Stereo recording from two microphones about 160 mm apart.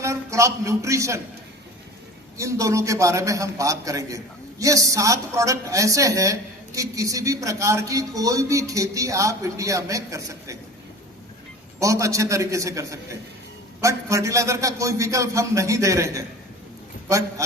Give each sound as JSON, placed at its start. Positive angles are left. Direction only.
{"t": 0.0, "sound": "a man's voice", "side_deg": -20}
{"t": 2.4, "sound": "a man's voice", "side_deg": -20}
{"t": 11.8, "sound": "a man's voice", "side_deg": -20}